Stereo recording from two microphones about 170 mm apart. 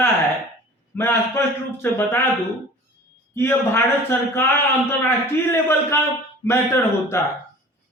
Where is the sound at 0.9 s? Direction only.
15° left (ahead or behind).